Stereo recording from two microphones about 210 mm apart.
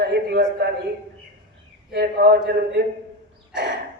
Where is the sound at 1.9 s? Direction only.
50° right (ahead or behind).